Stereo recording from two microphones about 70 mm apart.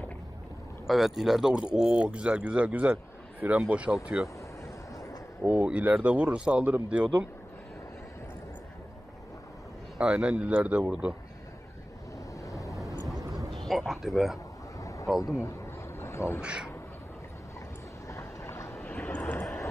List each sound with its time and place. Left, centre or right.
0.8 s a man's voice: centre
4.9 s a sound: left
5.4 s speech: right
9.9 s a man's voice: centre
12.4 s vehicle: left
13.5 s a sound: centre
14.8 s a sound: left
15.4 s vehicle: left
16.3 s a man's voice: centre
18.0 s vehicle: left
19.0 s vehicle: left